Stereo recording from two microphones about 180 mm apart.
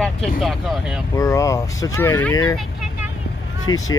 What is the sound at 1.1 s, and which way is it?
Speech, 20° left (ahead or behind).